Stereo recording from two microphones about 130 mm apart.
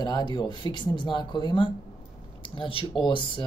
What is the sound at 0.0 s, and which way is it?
Speech, 35° left (ahead or behind).